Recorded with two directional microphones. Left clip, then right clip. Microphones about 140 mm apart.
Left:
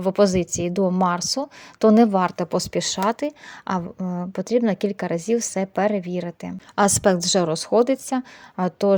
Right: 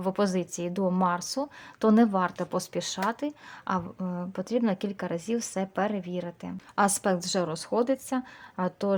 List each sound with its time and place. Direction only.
0.0 s a woman's voice: 30° left (ahead or behind)